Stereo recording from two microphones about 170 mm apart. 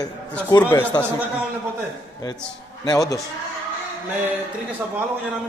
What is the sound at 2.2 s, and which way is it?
Speech, 20° left (ahead or behind).